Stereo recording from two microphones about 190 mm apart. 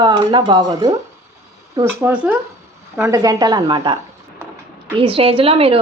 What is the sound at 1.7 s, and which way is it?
A woman's voice, 10° right (ahead or behind).